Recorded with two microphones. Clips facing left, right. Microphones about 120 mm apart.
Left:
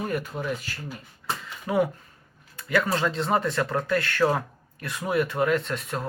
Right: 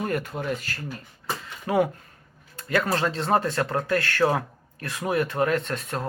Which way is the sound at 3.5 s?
45° right (ahead or behind).